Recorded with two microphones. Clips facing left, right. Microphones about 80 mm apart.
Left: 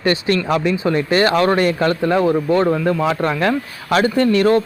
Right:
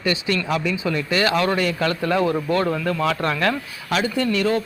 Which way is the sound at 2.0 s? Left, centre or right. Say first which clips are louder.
Left 4 dB; left.